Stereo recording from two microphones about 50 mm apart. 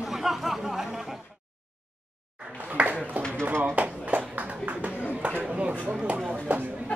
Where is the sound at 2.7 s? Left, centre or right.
Right.